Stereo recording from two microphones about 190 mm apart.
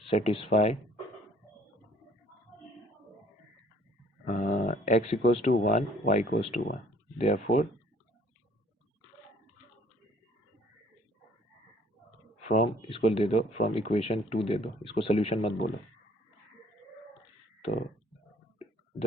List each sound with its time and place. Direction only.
0.1 s speech: 35° left (ahead or behind)
4.3 s speech: 45° left (ahead or behind)
12.5 s speech: 35° left (ahead or behind)